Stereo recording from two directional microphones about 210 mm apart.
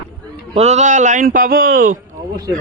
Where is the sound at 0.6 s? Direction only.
30° right (ahead or behind).